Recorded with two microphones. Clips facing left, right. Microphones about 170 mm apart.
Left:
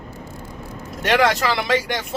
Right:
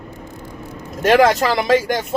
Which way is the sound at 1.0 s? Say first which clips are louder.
Right 5 dB; 40° right (ahead or behind).